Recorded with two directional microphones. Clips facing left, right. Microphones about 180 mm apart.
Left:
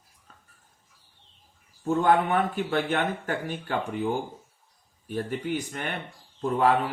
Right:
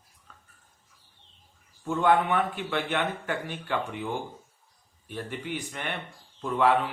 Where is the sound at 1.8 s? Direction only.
40° left (ahead or behind).